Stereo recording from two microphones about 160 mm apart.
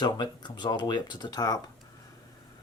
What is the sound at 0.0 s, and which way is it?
Speech, 25° left (ahead or behind).